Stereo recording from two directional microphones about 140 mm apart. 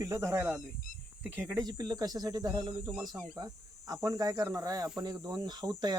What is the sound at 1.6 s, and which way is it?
Speech, 30° right (ahead or behind).